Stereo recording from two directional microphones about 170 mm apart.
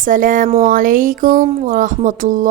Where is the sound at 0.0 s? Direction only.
50° right (ahead or behind).